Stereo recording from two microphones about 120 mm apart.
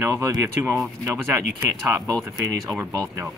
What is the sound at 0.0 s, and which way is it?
Speech, 25° right (ahead or behind).